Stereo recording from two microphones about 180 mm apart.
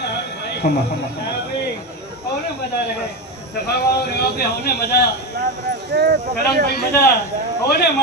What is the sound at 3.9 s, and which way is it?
A man's voice, 65° left (ahead or behind).